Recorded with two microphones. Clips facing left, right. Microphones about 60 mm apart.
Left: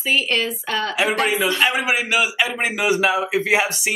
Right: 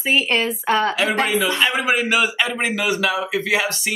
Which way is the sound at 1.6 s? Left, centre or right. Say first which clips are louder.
Even; left.